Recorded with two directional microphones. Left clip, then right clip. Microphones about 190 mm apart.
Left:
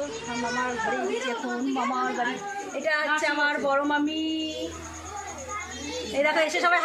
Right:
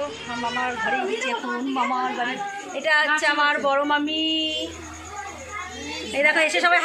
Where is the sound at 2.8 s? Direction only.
5° left (ahead or behind).